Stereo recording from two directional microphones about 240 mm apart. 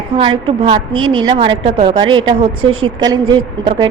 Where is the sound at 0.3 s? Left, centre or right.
Right.